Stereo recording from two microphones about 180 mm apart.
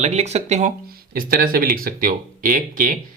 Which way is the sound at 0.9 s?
55° right (ahead or behind).